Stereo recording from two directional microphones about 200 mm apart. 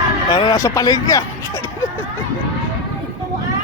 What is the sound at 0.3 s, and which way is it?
Speech, 20° left (ahead or behind).